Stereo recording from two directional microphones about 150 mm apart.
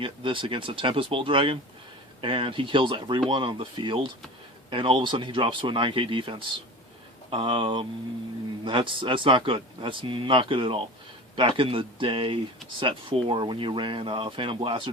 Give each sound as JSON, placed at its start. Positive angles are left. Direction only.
{"t": 0.0, "sound": "speech", "side_deg": -35}